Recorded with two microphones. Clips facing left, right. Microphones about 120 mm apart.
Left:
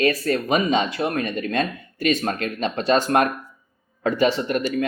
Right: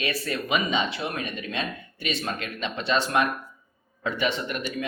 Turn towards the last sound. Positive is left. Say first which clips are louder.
# left 8 dB
turn(degrees=40)  # may be behind; listen again after turning